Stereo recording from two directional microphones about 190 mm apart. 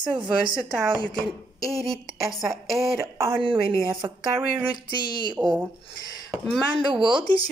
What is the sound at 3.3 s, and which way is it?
Speech, 25° right (ahead or behind).